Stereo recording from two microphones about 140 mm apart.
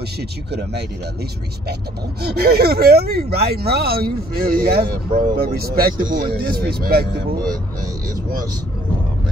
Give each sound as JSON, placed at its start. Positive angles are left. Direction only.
{"t": 2.3, "sound": "speech", "side_deg": -90}